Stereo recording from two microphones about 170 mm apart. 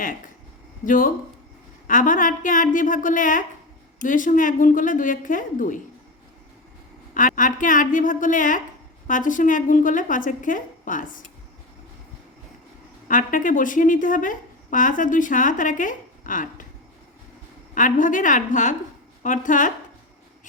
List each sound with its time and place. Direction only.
0.9 s a woman's voice: 55° left (ahead or behind)
7.1 s a woman's voice: 50° left (ahead or behind)
13.1 s a woman's voice: 50° left (ahead or behind)
17.7 s a woman's voice: 50° left (ahead or behind)